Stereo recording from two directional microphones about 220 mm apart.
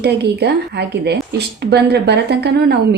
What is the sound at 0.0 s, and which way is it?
A woman's voice, 50° right (ahead or behind).